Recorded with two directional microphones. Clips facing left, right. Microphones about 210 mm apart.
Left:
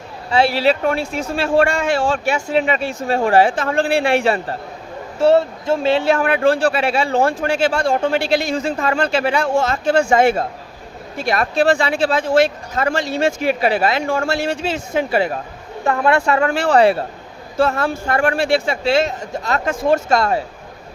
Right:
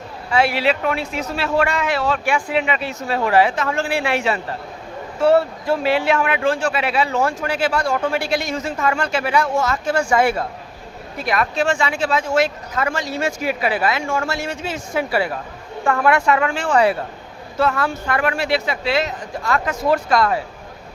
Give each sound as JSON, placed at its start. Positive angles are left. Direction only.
{"t": 0.3, "sound": "speech", "side_deg": 30}
{"t": 1.5, "sound": "speech", "side_deg": 30}
{"t": 2.3, "sound": "speech", "side_deg": 40}